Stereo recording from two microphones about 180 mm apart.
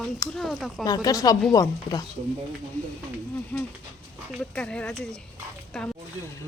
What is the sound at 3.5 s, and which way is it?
Speech, 10° left (ahead or behind).